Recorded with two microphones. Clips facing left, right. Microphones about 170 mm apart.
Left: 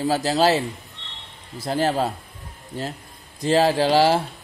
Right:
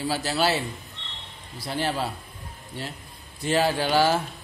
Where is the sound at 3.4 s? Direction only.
35° left (ahead or behind).